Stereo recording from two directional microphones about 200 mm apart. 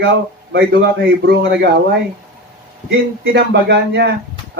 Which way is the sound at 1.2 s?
60° right (ahead or behind).